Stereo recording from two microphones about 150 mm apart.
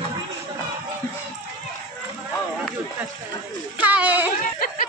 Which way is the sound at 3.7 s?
10° right (ahead or behind).